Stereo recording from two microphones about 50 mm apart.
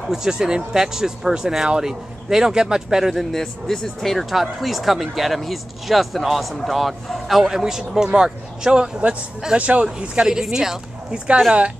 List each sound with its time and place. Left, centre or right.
0.1 s speech: centre
3.3 s speech: centre
9.6 s speech: right
9.9 s speech: centre